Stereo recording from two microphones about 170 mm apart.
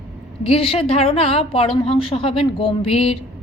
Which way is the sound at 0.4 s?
35° left (ahead or behind).